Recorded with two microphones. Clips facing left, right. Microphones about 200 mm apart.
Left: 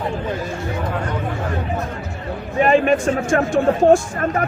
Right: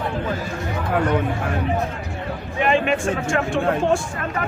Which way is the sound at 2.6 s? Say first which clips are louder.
Left 4 dB; 40° left (ahead or behind).